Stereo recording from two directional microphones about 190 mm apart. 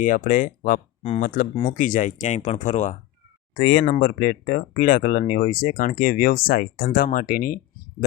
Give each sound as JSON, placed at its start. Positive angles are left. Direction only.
{"t": 0.0, "sound": "speech", "side_deg": 45}
{"t": 3.5, "sound": "speech", "side_deg": 50}